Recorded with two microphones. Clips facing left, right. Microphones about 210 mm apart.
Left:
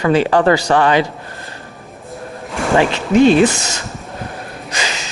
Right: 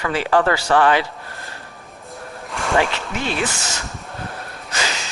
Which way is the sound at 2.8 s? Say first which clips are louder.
Left 15 dB; 20° left (ahead or behind).